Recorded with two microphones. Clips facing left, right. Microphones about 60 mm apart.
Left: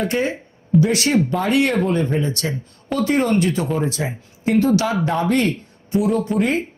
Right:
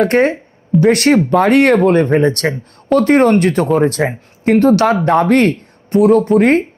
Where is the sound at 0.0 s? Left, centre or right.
Right.